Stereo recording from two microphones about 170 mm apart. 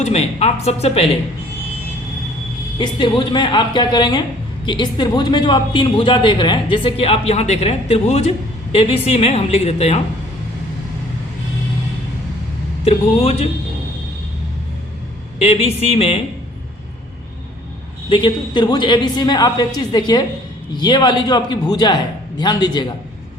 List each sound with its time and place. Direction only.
0.1 s a woman's voice: 40° left (ahead or behind)
2.7 s a man's voice: 25° left (ahead or behind)
12.8 s a woman's voice: 35° left (ahead or behind)
15.4 s a woman's voice: 40° left (ahead or behind)
18.1 s a man's voice: 25° left (ahead or behind)